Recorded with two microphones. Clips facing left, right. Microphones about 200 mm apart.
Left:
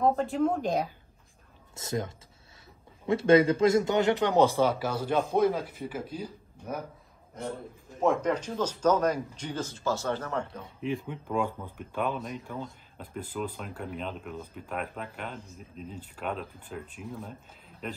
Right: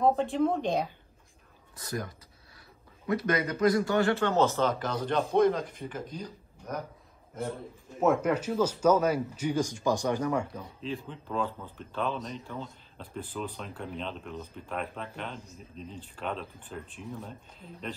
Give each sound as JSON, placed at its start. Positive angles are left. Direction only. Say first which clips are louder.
{"t": 0.0, "sound": "speech", "louder": "even", "side_deg": 0}
{"t": 1.8, "sound": "speech", "louder": "left 3 dB", "side_deg": 25}
{"t": 8.0, "sound": "speech", "louder": "right 1 dB", "side_deg": -5}
{"t": 11.1, "sound": "speech", "louder": "left 2 dB", "side_deg": 15}